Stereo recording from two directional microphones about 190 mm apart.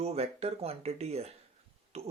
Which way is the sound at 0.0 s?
35° right (ahead or behind).